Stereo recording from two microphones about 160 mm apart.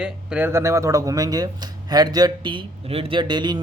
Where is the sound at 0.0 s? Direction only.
10° right (ahead or behind).